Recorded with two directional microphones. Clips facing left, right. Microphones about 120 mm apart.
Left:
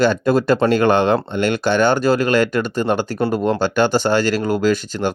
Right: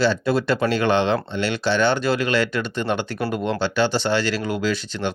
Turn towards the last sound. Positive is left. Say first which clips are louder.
# left 6 dB
turn(degrees=45)  # may be behind; listen again after turning